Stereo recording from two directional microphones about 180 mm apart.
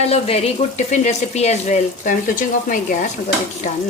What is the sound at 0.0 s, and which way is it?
Frying, 35° left (ahead or behind).